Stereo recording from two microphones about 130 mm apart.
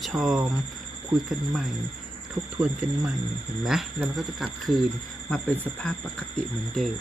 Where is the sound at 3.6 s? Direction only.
Centre (ahead or behind).